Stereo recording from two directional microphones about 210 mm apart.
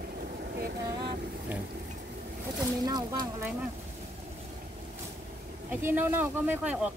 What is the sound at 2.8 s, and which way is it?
Speech, 20° right (ahead or behind).